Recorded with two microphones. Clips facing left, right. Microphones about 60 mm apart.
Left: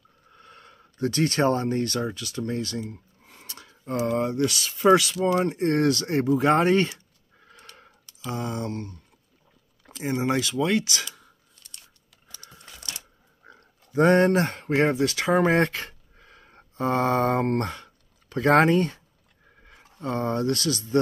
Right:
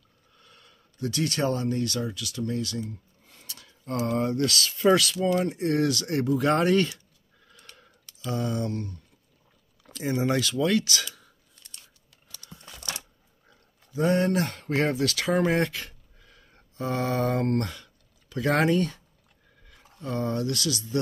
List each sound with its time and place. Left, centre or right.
0.3 s a sound: left
3.8 s speech: left
8.3 s speech: left
8.6 s speech: centre
13.5 s a sound: left
14.4 s speech: left